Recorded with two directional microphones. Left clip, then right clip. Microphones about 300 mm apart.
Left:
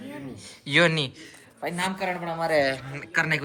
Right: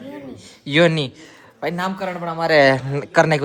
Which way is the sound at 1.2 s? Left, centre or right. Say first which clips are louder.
Right 7 dB; right.